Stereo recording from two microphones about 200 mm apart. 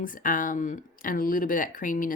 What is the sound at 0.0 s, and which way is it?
Speech, 40° left (ahead or behind).